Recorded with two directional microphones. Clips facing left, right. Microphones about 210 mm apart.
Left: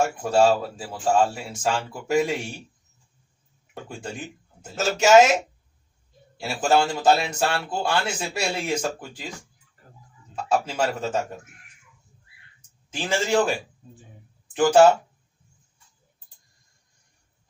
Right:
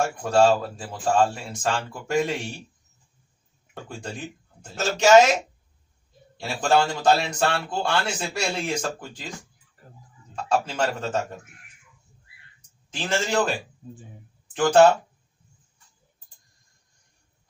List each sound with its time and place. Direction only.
0.2 s speech: 5° left (ahead or behind)
4.6 s speech: 5° left (ahead or behind)
6.3 s speech: 5° left (ahead or behind)
10.3 s speech: 10° left (ahead or behind)
12.9 s speech: 10° left (ahead or behind)